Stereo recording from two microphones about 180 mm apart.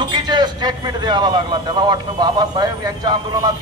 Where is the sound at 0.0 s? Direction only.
25° right (ahead or behind).